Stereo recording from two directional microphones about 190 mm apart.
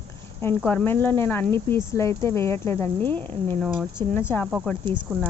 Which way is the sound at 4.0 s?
30° right (ahead or behind).